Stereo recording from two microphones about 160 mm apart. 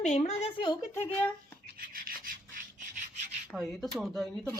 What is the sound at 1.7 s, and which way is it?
Rub, 60° right (ahead or behind).